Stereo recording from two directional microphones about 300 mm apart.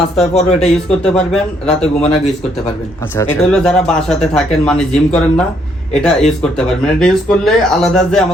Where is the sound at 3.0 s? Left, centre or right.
Centre.